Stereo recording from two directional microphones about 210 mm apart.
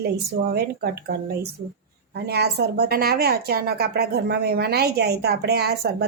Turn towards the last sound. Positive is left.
turn(degrees=-50)  # may be behind; listen again after turning